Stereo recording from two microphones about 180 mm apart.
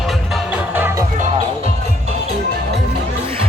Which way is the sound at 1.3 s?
35° right (ahead or behind).